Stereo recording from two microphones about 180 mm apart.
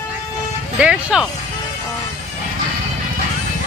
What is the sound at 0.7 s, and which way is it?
Speech, 5° right (ahead or behind).